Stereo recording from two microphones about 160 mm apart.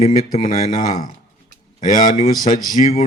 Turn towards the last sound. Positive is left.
turn(degrees=55)  # may be behind; listen again after turning